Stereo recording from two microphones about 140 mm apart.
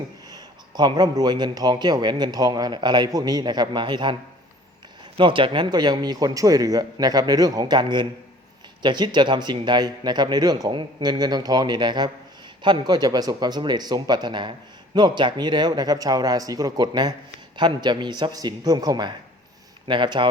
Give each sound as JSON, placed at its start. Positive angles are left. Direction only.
{"t": 0.3, "sound": "a man's voice", "side_deg": -30}